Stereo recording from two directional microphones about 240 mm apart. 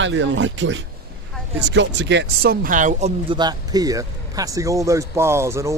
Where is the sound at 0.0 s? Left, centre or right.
Right.